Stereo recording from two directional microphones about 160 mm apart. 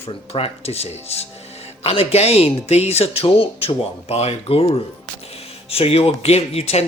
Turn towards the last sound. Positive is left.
turn(degrees=40)  # may be behind; listen again after turning